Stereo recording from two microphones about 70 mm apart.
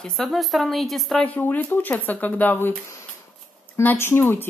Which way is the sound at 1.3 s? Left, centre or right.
Left.